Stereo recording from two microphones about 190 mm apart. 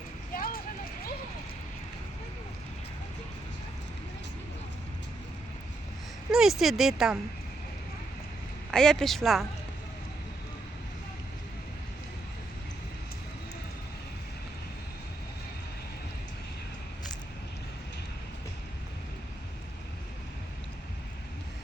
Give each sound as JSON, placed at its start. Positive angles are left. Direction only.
{"t": 0.3, "sound": "clip-clop", "side_deg": 50}
{"t": 6.3, "sound": "speech", "side_deg": 0}
{"t": 8.7, "sound": "speech", "side_deg": 5}